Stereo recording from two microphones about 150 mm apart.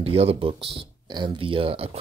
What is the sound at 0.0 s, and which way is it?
Speech, 40° right (ahead or behind).